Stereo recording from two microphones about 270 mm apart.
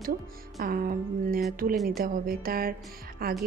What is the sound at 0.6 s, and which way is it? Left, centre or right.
Speech, right.